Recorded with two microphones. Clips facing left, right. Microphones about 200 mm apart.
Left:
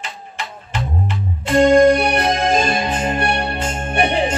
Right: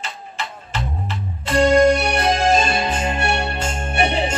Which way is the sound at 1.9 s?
55° left (ahead or behind).